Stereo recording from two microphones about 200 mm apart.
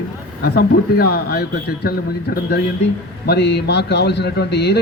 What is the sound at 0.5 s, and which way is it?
Speech, 50° left (ahead or behind).